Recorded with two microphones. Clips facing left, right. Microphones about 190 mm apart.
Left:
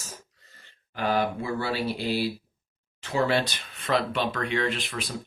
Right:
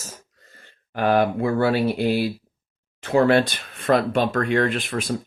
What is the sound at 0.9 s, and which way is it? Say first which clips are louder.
Speech: right 7 dB; 55° right (ahead or behind).